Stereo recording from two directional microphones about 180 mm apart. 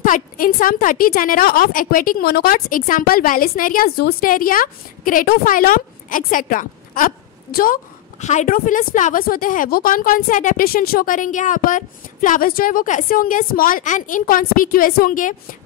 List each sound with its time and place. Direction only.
0.0 s a woman's voice: 50° left (ahead or behind)